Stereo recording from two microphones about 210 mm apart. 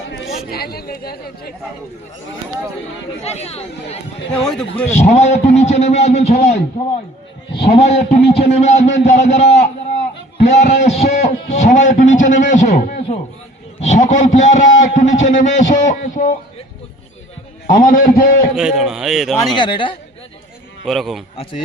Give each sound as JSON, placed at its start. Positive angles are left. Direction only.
{"t": 0.5, "sound": "speech", "side_deg": 45}
{"t": 3.2, "sound": "a man's voice", "side_deg": 30}
{"t": 17.7, "sound": "a man's voice", "side_deg": 40}
{"t": 18.5, "sound": "a man's voice", "side_deg": 0}
{"t": 19.5, "sound": "speech", "side_deg": 20}
{"t": 20.8, "sound": "a man's voice", "side_deg": 0}